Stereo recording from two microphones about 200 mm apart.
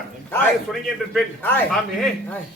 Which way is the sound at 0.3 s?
5° left (ahead or behind).